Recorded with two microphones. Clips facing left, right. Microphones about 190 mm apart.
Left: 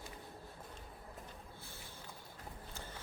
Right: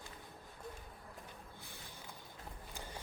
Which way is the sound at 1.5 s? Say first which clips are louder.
Left 1 dB; 15° right (ahead or behind).